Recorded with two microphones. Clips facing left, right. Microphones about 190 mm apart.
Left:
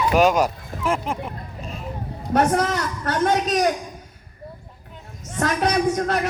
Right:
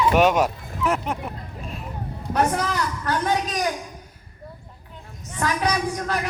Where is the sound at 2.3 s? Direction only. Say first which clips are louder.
Left 3 dB; 45° left (ahead or behind).